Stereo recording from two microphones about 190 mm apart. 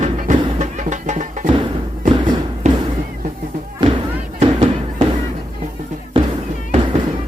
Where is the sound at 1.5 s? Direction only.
30° right (ahead or behind).